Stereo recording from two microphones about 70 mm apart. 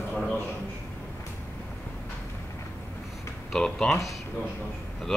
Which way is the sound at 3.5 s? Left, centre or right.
Centre.